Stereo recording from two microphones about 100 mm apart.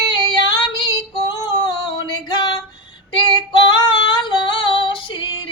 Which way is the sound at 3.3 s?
50° left (ahead or behind).